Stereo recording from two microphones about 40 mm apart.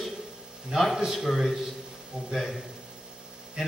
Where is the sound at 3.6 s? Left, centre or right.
Centre.